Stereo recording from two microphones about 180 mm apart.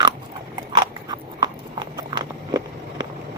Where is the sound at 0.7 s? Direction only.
20° right (ahead or behind).